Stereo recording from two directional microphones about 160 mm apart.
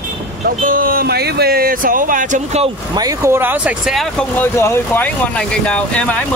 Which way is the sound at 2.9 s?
20° right (ahead or behind).